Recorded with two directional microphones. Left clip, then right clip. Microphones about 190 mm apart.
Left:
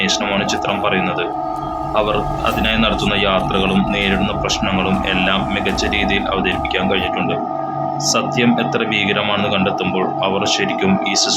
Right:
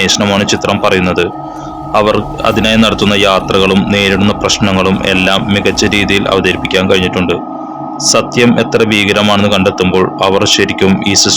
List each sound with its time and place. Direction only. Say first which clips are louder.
0.0 s speech: right 7 dB; 60° right (ahead or behind)